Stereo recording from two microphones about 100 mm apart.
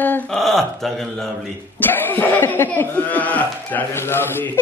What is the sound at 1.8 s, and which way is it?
Speech, 20° left (ahead or behind).